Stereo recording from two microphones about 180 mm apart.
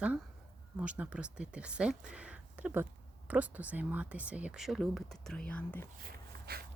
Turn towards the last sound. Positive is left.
turn(degrees=-60)  # may be behind; listen again after turning